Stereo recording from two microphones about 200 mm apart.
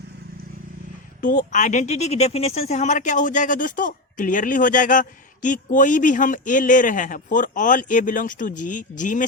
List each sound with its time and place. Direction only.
1.2 s speech: 40° left (ahead or behind)